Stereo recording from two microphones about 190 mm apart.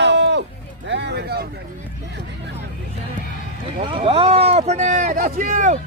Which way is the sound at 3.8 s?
30° right (ahead or behind).